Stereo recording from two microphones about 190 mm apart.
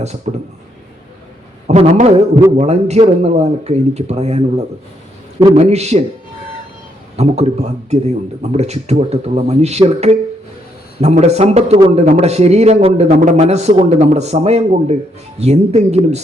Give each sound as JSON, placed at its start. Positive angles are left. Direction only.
{"t": 0.3, "sound": "a man's voice", "side_deg": -35}
{"t": 1.6, "sound": "a man's voice", "side_deg": -35}
{"t": 7.2, "sound": "a man's voice", "side_deg": -35}